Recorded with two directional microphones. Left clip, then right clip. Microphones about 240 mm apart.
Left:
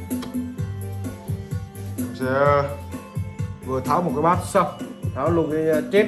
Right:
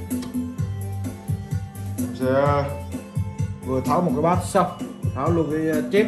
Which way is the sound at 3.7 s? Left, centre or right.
Centre.